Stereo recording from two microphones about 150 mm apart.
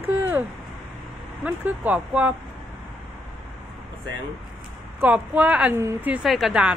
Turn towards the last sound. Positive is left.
turn(degrees=-5)  # may be behind; listen again after turning